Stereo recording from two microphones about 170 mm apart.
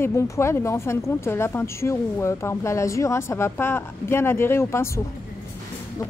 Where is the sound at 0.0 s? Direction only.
15° left (ahead or behind).